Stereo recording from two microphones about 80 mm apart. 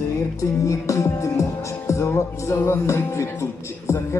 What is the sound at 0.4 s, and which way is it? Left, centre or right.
Music, left.